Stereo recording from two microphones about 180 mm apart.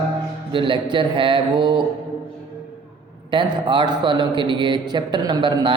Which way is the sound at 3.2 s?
25° right (ahead or behind).